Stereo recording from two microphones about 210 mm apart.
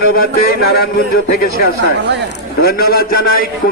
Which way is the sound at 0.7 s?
45° left (ahead or behind).